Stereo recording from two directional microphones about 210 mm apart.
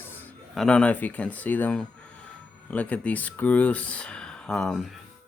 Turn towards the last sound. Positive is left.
turn(degrees=5)  # may be behind; listen again after turning